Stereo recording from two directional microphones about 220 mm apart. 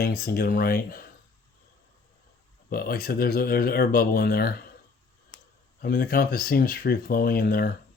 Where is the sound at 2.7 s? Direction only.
45° left (ahead or behind).